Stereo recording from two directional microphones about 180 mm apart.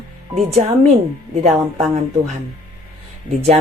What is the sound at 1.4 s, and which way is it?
Speech, 35° right (ahead or behind).